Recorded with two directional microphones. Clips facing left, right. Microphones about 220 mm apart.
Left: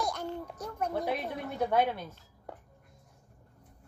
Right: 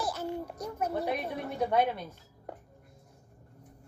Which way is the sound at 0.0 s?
5° right (ahead or behind).